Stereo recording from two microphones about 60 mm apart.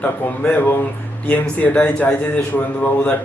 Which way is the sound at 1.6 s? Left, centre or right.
Left.